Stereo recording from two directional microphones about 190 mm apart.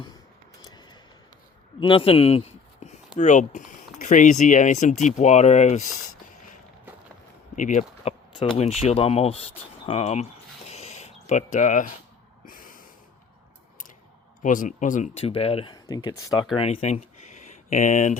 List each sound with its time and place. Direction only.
0.6 s a sound: 20° left (ahead or behind)
3.2 s speech: 40° left (ahead or behind)
7.5 s speech: 40° left (ahead or behind)
10.7 s a sound: 35° left (ahead or behind)
12.5 s snort: 45° left (ahead or behind)
14.4 s speech: 45° left (ahead or behind); by 16.1 s 20° left (ahead or behind)
16.6 s speech: 35° left (ahead or behind)